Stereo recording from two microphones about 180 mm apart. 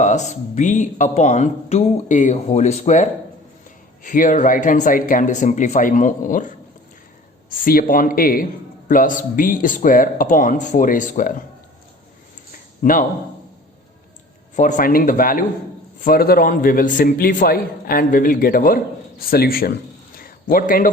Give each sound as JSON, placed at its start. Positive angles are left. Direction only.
{"t": 0.0, "sound": "a man's voice", "side_deg": 40}
{"t": 7.6, "sound": "a man's voice", "side_deg": 50}
{"t": 12.8, "sound": "a man's voice", "side_deg": 45}
{"t": 14.5, "sound": "a man's voice", "side_deg": 45}
{"t": 20.1, "sound": "a sound", "side_deg": 55}